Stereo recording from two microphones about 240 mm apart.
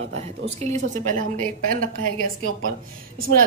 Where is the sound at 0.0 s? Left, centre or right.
Right.